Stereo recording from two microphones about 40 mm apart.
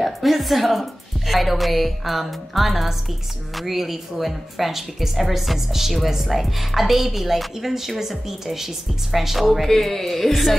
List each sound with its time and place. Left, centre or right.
0.0 s a woman's voice: centre